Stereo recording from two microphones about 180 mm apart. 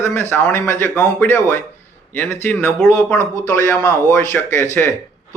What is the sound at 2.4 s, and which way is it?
Speech, 10° left (ahead or behind).